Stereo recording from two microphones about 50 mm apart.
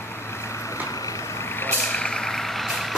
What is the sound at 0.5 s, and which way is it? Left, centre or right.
Vehicle, left.